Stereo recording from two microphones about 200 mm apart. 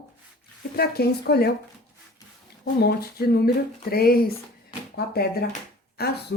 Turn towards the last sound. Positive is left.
turn(degrees=50)  # may be behind; listen again after turning